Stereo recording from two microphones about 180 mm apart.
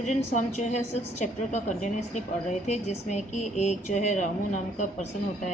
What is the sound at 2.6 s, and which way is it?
A woman's voice, 40° left (ahead or behind).